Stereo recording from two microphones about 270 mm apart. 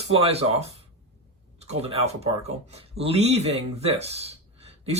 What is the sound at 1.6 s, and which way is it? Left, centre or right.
Speech, right.